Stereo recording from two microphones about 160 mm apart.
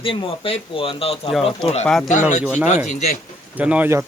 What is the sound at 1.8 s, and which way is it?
Speech, 10° left (ahead or behind).